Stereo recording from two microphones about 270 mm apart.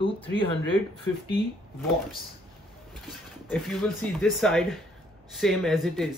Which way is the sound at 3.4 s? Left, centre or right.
Centre.